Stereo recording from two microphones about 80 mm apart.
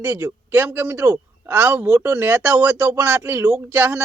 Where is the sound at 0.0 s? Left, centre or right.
Right.